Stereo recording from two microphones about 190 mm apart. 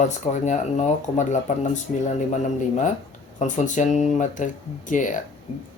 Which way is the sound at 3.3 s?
40° left (ahead or behind).